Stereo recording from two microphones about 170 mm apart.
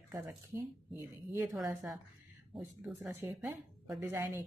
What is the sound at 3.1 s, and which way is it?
Speech, 15° right (ahead or behind).